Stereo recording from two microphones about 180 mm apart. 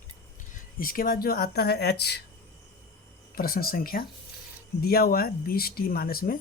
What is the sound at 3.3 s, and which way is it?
Speech, 55° left (ahead or behind).